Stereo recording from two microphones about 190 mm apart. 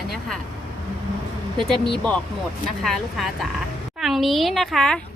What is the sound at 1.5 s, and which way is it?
Speech, centre (ahead or behind).